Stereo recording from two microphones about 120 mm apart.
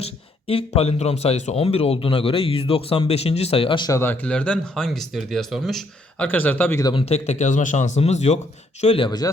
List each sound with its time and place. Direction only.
0.0 s speech: 55° left (ahead or behind)
3.8 s speech: 20° left (ahead or behind); by 5.8 s centre (ahead or behind)
6.1 s speech: 15° left (ahead or behind)
6.9 s speech: 60° left (ahead or behind)
8.8 s speech: 55° left (ahead or behind)
9.0 s speech: 35° left (ahead or behind)